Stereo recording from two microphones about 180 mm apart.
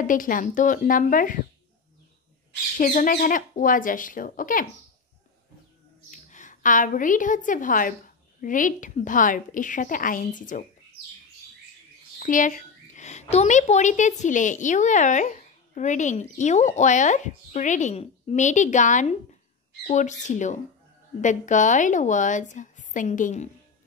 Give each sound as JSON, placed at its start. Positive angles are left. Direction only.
{"t": 0.0, "sound": "speech", "side_deg": 50}
{"t": 2.8, "sound": "speech", "side_deg": 45}
{"t": 6.0, "sound": "a woman's voice", "side_deg": 40}
{"t": 12.2, "sound": "a woman's voice", "side_deg": 45}